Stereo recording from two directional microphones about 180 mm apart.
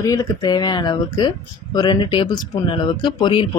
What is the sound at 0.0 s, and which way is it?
Speech, 20° left (ahead or behind).